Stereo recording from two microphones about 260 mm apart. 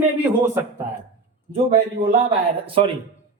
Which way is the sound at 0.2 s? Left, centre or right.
Centre.